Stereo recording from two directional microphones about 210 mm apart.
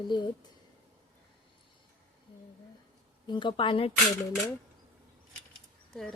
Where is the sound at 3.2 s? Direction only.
20° left (ahead or behind).